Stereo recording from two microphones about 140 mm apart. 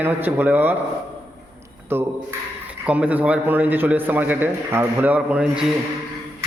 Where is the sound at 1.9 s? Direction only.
15° right (ahead or behind).